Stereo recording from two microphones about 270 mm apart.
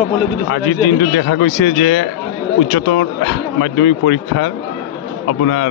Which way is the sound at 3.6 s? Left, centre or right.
Left.